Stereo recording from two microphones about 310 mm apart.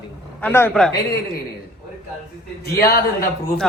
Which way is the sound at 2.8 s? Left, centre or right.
Left.